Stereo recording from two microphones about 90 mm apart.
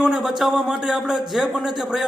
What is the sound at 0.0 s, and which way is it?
A man's voice, 5° right (ahead or behind).